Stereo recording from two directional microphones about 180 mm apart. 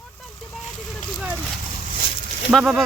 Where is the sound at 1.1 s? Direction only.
5° right (ahead or behind).